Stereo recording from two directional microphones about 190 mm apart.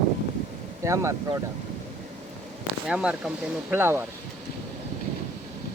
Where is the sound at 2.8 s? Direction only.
5° right (ahead or behind).